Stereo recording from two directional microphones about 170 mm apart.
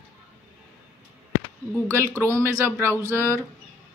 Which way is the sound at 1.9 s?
15° right (ahead or behind).